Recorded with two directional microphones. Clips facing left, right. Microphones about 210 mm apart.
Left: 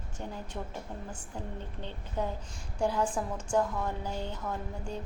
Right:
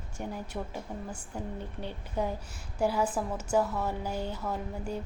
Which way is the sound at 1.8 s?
10° right (ahead or behind).